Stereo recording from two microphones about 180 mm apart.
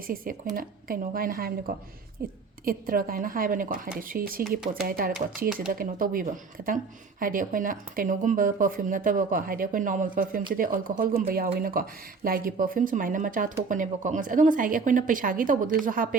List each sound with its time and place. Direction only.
0.5 s speech: 55° right (ahead or behind)